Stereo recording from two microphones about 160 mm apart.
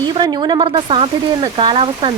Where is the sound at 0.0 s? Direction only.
30° right (ahead or behind).